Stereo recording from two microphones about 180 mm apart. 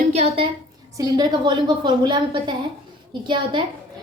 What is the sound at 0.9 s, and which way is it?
A woman's voice, 20° right (ahead or behind).